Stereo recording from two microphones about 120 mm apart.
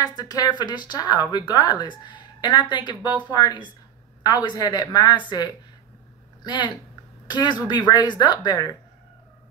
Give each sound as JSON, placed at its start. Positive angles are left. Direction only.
{"t": 0.0, "sound": "speech", "side_deg": 35}